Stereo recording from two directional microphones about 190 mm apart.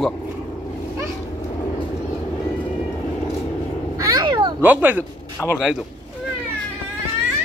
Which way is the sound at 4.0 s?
20° right (ahead or behind).